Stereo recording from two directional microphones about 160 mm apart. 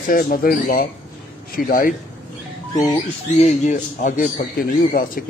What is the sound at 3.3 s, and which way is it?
Speech, 45° left (ahead or behind).